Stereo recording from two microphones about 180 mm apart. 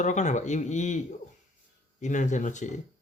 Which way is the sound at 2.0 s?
45° left (ahead or behind).